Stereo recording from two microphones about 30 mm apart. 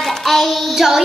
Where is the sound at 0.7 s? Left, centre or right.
Centre.